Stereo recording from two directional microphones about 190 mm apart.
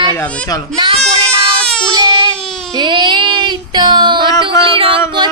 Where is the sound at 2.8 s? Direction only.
25° right (ahead or behind).